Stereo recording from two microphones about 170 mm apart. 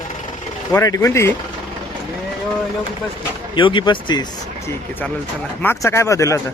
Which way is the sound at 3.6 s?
30° left (ahead or behind).